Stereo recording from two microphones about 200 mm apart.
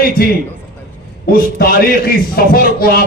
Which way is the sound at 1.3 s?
45° left (ahead or behind).